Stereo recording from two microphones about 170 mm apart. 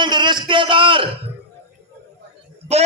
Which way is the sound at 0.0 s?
25° right (ahead or behind).